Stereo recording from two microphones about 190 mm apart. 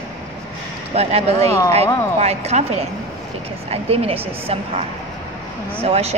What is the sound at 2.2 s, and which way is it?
A woman's voice, 35° right (ahead or behind).